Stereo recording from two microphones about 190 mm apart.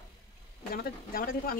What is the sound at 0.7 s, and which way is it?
Speech, 50° left (ahead or behind).